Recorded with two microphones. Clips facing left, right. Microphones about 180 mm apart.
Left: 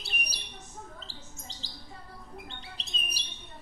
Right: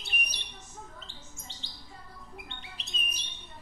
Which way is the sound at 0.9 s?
35° left (ahead or behind).